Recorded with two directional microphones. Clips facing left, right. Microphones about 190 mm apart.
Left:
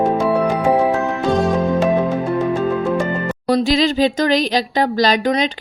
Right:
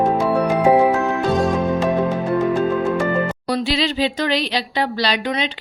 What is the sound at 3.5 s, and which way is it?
Speech, 45° left (ahead or behind).